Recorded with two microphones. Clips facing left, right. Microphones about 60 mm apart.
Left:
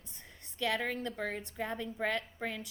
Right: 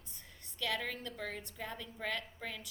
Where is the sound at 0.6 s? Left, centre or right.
Left.